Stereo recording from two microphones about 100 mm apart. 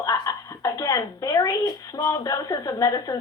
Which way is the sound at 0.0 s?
35° left (ahead or behind).